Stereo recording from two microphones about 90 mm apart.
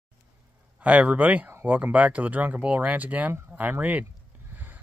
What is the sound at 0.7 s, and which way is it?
Speech, 15° right (ahead or behind).